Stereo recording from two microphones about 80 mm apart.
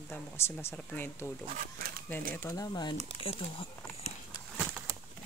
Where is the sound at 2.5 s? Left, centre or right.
Left.